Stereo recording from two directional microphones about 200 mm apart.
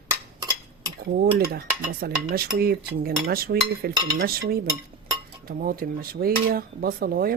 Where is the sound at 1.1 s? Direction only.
50° right (ahead or behind).